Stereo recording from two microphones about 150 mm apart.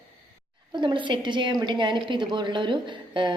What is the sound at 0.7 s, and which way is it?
A woman's voice, 30° right (ahead or behind).